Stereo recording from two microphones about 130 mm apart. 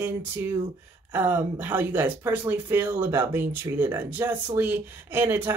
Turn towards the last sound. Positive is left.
turn(degrees=-15)  # may be behind; listen again after turning